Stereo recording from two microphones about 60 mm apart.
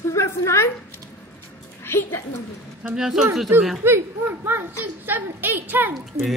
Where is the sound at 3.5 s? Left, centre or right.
Right.